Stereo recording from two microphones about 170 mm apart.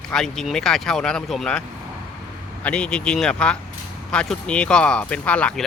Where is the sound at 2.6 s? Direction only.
5° left (ahead or behind).